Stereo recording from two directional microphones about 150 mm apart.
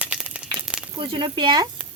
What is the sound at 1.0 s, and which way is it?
Speech, 35° right (ahead or behind).